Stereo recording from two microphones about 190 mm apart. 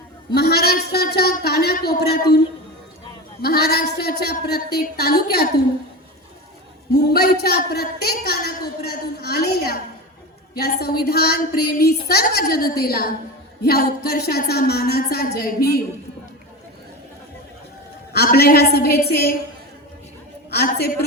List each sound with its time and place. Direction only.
0.3 s a man's voice: 55° left (ahead or behind)
3.4 s a woman's voice: 55° left (ahead or behind)
7.1 s a woman's voice: 55° left (ahead or behind)
18.1 s a woman's voice: 55° left (ahead or behind)
20.5 s a woman's voice: 55° left (ahead or behind)